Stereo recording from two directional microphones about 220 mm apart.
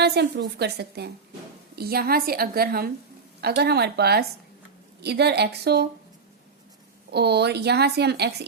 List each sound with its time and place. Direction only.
0.0 s speech: 50° right (ahead or behind)
7.1 s speech: 50° right (ahead or behind)